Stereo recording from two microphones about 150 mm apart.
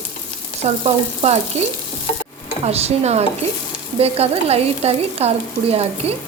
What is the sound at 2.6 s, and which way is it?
Speech, 45° right (ahead or behind).